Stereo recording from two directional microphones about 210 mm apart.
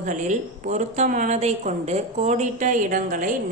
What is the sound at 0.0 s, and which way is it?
A woman's voice, 35° right (ahead or behind).